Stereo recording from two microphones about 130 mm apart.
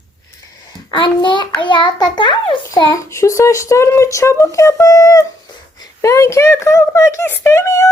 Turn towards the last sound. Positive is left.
turn(degrees=20)  # may be behind; listen again after turning